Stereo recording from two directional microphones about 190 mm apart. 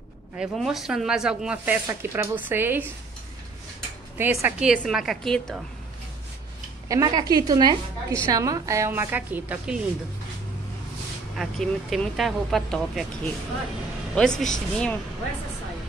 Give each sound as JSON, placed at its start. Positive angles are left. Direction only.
{"t": 0.4, "sound": "a woman's voice", "side_deg": 0}
{"t": 4.2, "sound": "speech", "side_deg": -10}
{"t": 6.9, "sound": "a woman's voice", "side_deg": -20}
{"t": 11.3, "sound": "speech", "side_deg": 0}
{"t": 14.1, "sound": "speech", "side_deg": 5}